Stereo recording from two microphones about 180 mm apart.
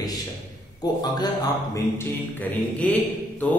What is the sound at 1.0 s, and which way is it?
Speech, 20° left (ahead or behind).